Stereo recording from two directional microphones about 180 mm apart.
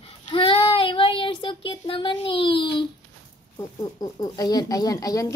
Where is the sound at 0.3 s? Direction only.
30° left (ahead or behind).